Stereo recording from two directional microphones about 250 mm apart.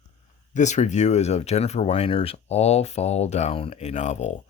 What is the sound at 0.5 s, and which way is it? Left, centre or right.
Speech, left.